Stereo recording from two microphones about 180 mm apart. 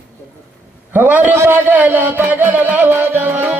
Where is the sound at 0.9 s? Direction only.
10° right (ahead or behind).